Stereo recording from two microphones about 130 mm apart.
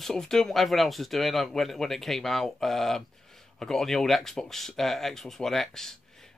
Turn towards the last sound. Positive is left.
turn(degrees=5)  # may be behind; listen again after turning